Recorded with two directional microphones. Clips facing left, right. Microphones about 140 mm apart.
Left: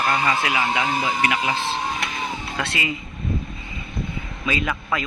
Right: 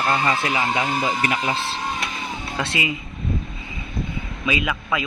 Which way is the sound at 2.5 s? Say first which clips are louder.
Right 3 dB; 20° right (ahead or behind).